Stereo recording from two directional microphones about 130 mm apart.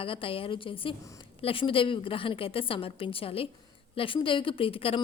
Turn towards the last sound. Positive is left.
turn(degrees=45)  # may be behind; listen again after turning